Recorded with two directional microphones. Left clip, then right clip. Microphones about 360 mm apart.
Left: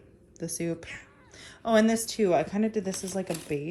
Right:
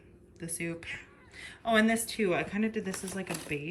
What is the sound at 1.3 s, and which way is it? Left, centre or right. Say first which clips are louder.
A woman's voice: left 3 dB; centre.